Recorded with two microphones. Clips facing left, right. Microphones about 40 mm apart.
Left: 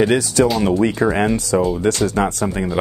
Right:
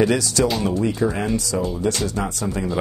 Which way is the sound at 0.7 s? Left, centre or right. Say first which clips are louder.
Left 4 dB; left.